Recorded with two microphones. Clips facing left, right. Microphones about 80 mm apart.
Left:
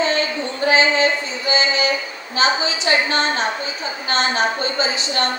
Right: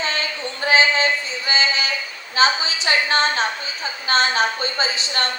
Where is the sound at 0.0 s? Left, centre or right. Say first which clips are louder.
Left 5 dB; left.